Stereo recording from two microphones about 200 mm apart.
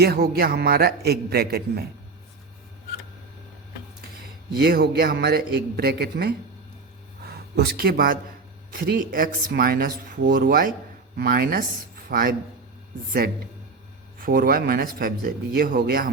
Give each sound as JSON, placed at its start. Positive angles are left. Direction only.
{"t": 0.0, "sound": "speech", "side_deg": -50}
{"t": 4.5, "sound": "speech", "side_deg": -50}
{"t": 14.2, "sound": "speech", "side_deg": -45}